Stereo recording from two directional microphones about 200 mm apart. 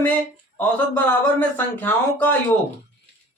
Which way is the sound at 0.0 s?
10° left (ahead or behind).